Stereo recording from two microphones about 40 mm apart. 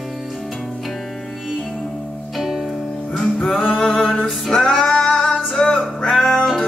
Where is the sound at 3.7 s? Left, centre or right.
Centre.